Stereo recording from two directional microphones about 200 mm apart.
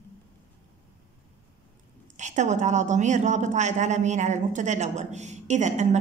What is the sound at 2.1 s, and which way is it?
A woman's voice, 35° right (ahead or behind).